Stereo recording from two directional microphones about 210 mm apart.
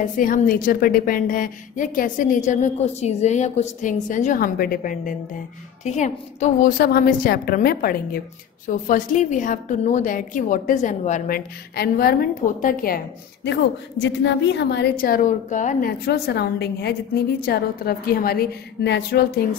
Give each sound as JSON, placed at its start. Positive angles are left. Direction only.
{"t": 0.2, "sound": "a woman's voice", "side_deg": 40}
{"t": 16.1, "sound": "a woman's voice", "side_deg": 50}